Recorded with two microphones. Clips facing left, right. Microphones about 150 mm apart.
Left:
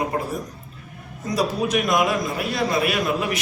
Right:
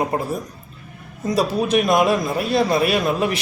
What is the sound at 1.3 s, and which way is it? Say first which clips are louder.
A man's voice: right 3 dB; 30° right (ahead or behind).